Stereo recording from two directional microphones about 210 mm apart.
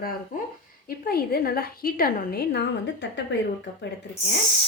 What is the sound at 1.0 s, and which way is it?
A woman's voice, 45° left (ahead or behind).